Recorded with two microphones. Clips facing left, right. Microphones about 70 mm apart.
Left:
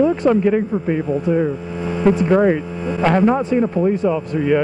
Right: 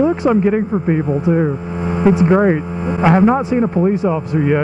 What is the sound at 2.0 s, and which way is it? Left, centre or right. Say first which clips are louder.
A man's voice: right 2 dB; centre.